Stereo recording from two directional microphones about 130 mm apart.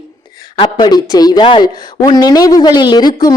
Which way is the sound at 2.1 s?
30° left (ahead or behind).